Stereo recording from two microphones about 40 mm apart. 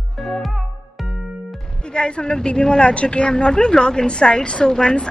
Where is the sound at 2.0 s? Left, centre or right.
Left.